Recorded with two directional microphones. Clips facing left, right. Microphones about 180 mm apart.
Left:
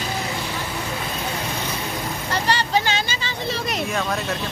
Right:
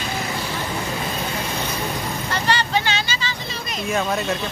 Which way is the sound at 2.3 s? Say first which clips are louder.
Left 1 dB; 35° left (ahead or behind).